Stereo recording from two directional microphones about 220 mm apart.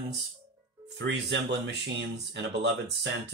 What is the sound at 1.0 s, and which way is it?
Speech, 50° right (ahead or behind).